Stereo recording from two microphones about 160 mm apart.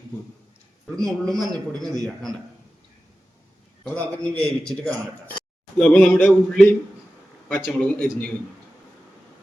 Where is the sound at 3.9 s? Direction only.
10° left (ahead or behind).